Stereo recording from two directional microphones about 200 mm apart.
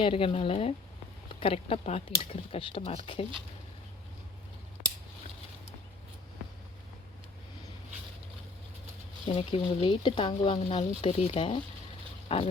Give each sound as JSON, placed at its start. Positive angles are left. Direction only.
{"t": 0.0, "sound": "speech", "side_deg": 25}
{"t": 9.2, "sound": "speech", "side_deg": 30}